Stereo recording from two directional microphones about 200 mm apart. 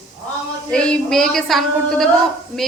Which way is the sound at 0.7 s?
5° left (ahead or behind).